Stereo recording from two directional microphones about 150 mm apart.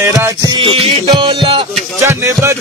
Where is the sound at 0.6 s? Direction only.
35° right (ahead or behind).